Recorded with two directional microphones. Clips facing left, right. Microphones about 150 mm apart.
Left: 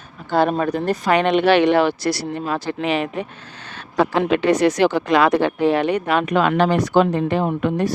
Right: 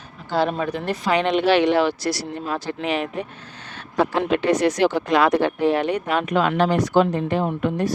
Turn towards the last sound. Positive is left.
turn(degrees=75)  # may be behind; listen again after turning